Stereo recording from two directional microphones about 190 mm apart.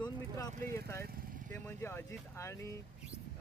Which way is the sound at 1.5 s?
10° left (ahead or behind).